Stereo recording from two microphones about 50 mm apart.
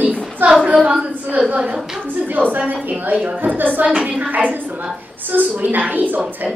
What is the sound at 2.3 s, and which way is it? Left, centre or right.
A woman's voice, right.